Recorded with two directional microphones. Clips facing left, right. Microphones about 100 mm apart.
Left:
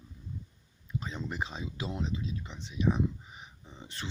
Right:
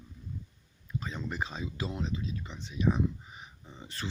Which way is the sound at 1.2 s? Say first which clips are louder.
Right 1 dB; 15° left (ahead or behind).